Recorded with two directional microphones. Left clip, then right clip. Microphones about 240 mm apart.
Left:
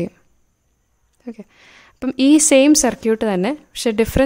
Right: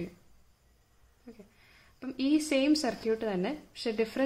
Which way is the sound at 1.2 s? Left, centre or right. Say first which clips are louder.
Left 17 dB; left.